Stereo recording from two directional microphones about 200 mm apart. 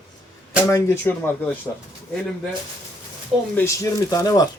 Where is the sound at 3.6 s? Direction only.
15° left (ahead or behind).